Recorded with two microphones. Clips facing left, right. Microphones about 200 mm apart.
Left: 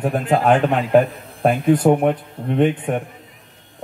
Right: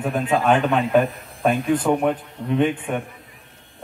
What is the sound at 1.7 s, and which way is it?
A man's voice, 40° left (ahead or behind).